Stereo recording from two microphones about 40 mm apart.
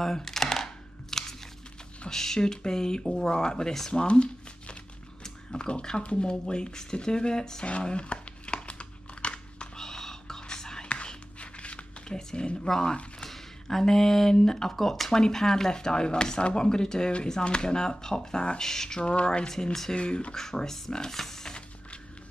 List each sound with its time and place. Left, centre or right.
0.0 s a sound: centre
1.1 s crunch: centre
2.0 s speech: centre
3.9 s speech: left
7.6 s crumpling: left
9.8 s whispering: centre
11.3 s a sound: left
12.2 s speech: centre
13.3 s a sound: centre
14.3 s speech: centre
19.0 s speech: left
20.0 s speech: left
20.3 s speech: centre